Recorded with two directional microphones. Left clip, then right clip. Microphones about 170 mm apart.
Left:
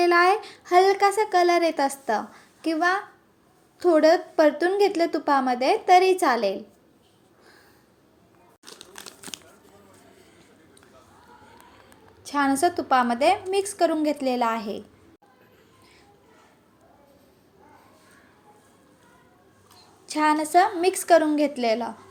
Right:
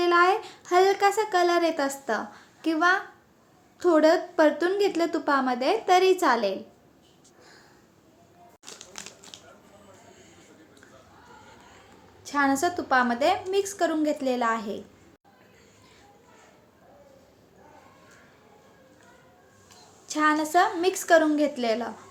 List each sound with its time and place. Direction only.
0.0 s a child's voice: 20° left (ahead or behind)
9.3 s a sound: 75° left (ahead or behind)
12.2 s a woman's voice: 20° left (ahead or behind)
20.1 s a woman's voice: 20° left (ahead or behind)